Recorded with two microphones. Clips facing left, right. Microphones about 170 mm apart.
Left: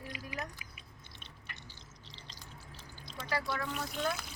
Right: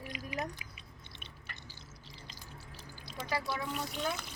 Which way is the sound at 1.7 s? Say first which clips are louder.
Right 2 dB; 10° right (ahead or behind).